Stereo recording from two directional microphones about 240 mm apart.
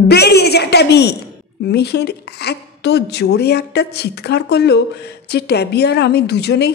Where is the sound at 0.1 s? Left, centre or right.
Left.